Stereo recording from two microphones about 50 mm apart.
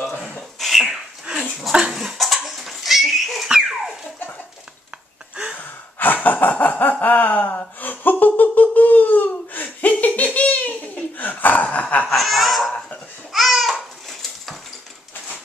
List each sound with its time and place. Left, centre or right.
0.6 s a sound: centre
1.2 s dog: centre
1.7 s laughter: centre
5.3 s gasp: centre
5.9 s a sound: left
12.1 s laughter: centre
13.3 s babbling: centre